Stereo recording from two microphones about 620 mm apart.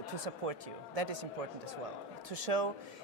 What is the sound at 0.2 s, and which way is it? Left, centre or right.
Speech, right.